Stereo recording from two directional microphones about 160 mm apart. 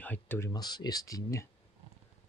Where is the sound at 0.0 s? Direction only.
10° left (ahead or behind).